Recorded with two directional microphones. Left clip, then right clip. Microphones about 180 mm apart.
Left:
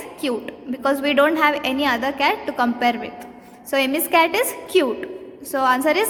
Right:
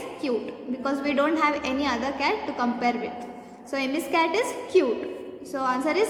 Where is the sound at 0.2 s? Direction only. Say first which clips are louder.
Left 4 dB; 50° left (ahead or behind).